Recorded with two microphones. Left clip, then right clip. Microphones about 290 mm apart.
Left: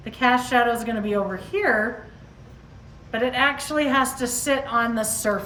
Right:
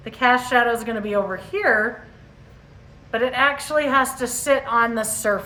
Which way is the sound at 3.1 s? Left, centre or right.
Centre.